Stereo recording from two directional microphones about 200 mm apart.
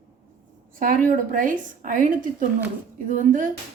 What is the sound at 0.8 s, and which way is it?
A woman's voice, 45° right (ahead or behind).